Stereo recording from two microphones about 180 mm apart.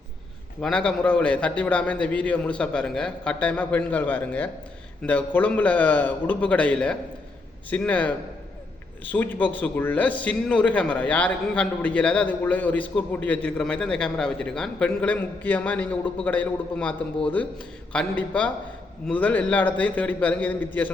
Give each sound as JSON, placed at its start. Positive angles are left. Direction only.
{"t": 0.6, "sound": "a man's voice", "side_deg": 5}
{"t": 17.9, "sound": "a man's voice", "side_deg": 5}